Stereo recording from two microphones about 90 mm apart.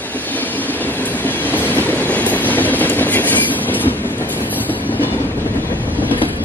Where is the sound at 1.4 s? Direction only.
20° left (ahead or behind).